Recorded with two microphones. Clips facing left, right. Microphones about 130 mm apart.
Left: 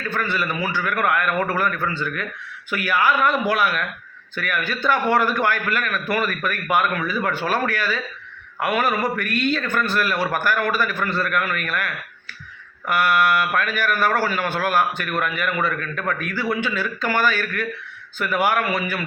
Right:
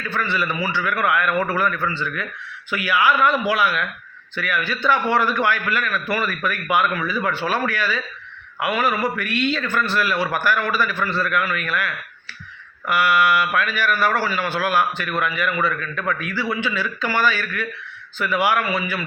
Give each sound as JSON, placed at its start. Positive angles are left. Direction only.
{"t": 0.1, "sound": "a man's voice", "side_deg": 45}
{"t": 12.9, "sound": "a man's voice", "side_deg": 45}